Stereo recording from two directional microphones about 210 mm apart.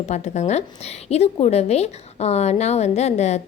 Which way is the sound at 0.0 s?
35° left (ahead or behind).